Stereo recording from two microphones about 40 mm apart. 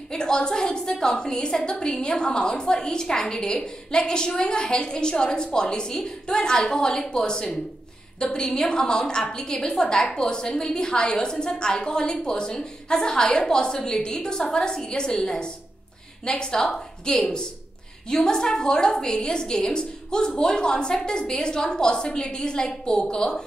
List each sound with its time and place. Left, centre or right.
0.1 s a woman's voice: left